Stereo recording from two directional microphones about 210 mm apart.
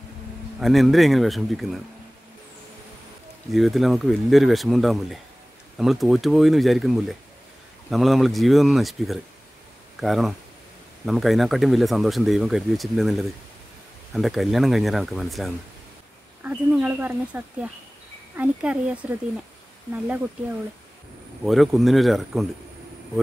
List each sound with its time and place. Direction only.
0.6 s speech: centre (ahead or behind)
3.5 s speech: centre (ahead or behind)
21.5 s speech: centre (ahead or behind)